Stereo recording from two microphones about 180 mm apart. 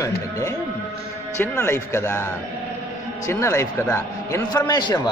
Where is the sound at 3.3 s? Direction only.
15° left (ahead or behind).